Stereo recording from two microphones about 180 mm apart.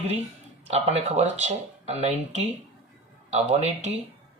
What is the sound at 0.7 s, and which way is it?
Speech, 35° right (ahead or behind).